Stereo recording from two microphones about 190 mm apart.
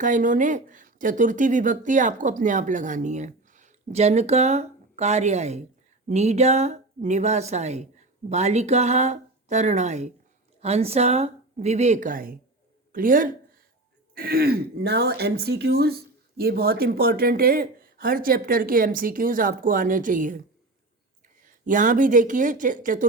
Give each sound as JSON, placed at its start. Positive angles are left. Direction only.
{"t": 0.0, "sound": "a woman's voice", "side_deg": -40}
{"t": 21.4, "sound": "speech", "side_deg": -45}